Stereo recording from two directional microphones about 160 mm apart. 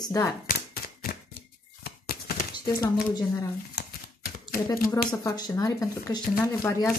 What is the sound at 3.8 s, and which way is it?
Typewriter, 90° left.